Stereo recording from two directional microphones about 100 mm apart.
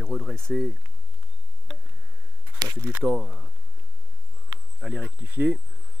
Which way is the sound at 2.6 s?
30° right (ahead or behind).